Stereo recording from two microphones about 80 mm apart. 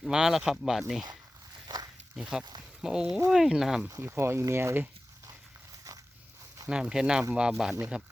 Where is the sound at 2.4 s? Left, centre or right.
Right.